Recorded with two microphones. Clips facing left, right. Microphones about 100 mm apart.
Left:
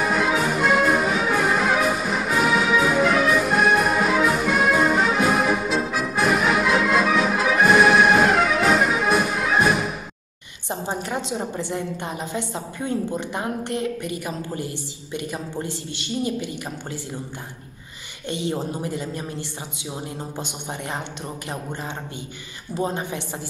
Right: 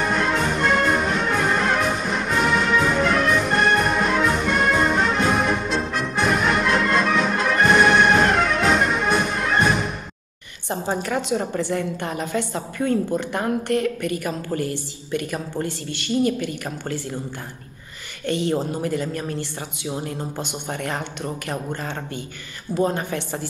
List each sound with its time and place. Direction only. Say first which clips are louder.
0.0 s music: left 1 dB; 5° left (ahead or behind)
11.0 s a woman's voice: right 3 dB; 20° left (ahead or behind)
18.2 s a woman's voice: right 4 dB; 15° left (ahead or behind)
22.8 s speech: right 3 dB; 20° left (ahead or behind)